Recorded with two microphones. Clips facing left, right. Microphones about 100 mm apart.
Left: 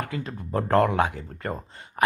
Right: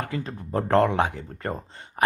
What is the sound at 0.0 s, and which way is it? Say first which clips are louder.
A man's voice: right 1 dB; 30° right (ahead or behind).